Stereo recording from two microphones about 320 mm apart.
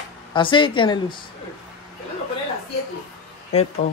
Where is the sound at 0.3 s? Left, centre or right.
Centre.